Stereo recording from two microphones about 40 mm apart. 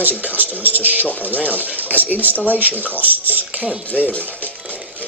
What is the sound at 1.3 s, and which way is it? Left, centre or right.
Speech, right.